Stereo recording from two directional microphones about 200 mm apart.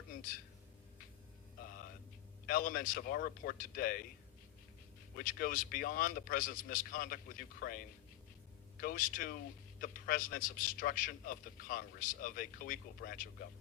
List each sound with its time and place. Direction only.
2.5 s a man's voice: 45° left (ahead or behind)
5.1 s a man's voice: 45° left (ahead or behind)